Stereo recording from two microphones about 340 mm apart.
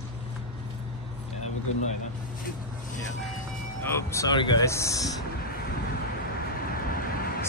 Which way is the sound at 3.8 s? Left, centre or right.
Centre.